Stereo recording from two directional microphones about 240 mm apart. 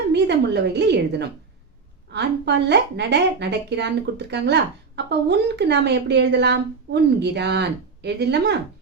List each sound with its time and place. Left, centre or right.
0.1 s a woman's voice: right